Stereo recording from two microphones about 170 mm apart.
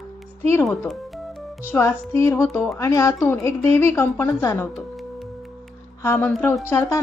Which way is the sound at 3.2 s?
5° left (ahead or behind).